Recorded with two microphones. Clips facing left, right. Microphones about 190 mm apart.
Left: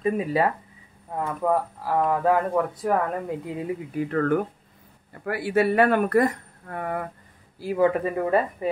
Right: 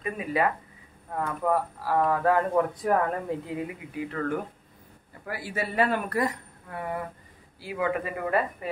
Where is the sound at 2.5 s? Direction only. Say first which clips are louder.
Left 1 dB; 5° left (ahead or behind).